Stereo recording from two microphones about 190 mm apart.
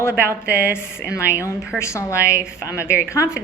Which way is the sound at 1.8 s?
15° left (ahead or behind).